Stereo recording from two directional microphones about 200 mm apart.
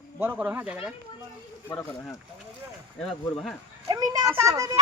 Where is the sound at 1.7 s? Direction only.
5° left (ahead or behind).